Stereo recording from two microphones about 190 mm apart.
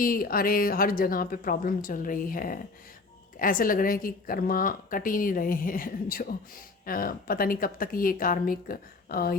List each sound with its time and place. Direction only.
0.0 s a woman's voice: 50° left (ahead or behind)